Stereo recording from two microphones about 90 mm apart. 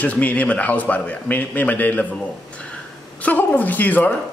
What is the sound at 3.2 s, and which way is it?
Speech, 20° left (ahead or behind).